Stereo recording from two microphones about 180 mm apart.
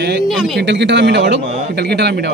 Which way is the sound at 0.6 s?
70° right (ahead or behind).